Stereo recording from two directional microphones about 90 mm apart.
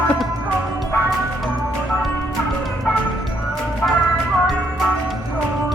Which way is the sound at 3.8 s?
10° left (ahead or behind).